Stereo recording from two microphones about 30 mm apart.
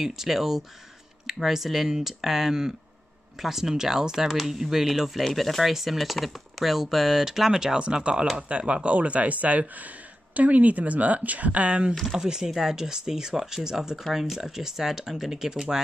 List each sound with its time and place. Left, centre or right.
0.0 s speech: centre
5.2 s speech: centre
7.8 s speech: right
8.9 s speech: right
12.2 s speech: right
14.0 s speech: centre